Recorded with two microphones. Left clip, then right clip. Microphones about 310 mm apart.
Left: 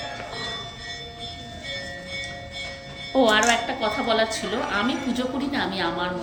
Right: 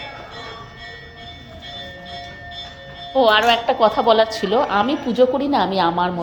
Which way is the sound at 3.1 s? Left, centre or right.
Centre.